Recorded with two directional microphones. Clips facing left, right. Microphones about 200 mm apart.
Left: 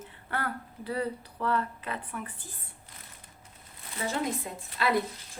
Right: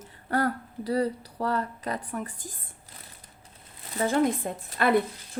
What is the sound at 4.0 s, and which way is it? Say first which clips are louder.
Speech: right 7 dB; 50° right (ahead or behind).